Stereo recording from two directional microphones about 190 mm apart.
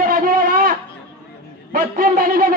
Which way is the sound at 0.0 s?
45° right (ahead or behind).